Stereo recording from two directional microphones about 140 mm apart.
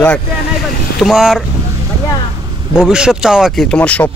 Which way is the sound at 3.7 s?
10° left (ahead or behind).